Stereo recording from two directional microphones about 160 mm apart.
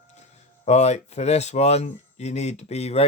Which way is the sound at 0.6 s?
45° left (ahead or behind).